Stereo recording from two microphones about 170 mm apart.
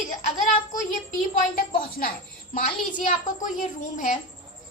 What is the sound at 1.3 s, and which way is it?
A woman's voice, 60° left (ahead or behind).